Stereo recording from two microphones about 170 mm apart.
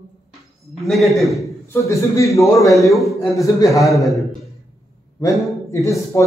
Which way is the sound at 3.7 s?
Centre (ahead or behind).